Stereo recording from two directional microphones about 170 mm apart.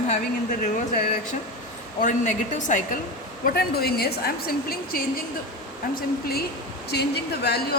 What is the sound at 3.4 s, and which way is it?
A woman's voice, 65° left (ahead or behind).